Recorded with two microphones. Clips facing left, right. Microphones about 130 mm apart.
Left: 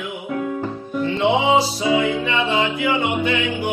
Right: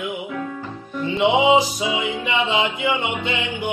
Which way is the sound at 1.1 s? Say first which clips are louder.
Right 1 dB; 15° right (ahead or behind).